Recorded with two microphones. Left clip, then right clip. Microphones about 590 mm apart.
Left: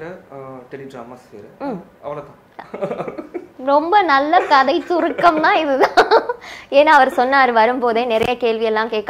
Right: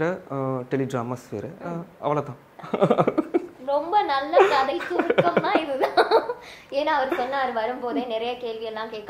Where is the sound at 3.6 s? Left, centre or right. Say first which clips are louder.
Left 10 dB; left.